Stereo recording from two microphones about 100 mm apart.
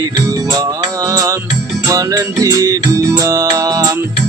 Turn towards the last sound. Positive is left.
turn(degrees=-35)  # may be behind; listen again after turning